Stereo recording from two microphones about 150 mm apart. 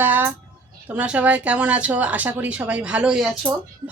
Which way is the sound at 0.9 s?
10° right (ahead or behind).